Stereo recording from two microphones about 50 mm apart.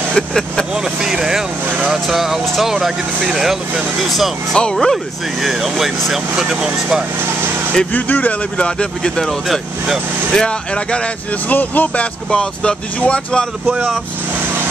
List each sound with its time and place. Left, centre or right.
0.1 s speech: centre
0.7 s speech: centre
2.7 s speech: centre
5.4 s speech: centre
7.9 s speech: left
11.5 s speech: left
12.3 s speech: centre